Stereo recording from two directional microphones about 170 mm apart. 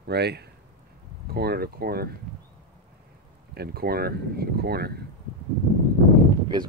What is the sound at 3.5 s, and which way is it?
Speech, 65° right (ahead or behind).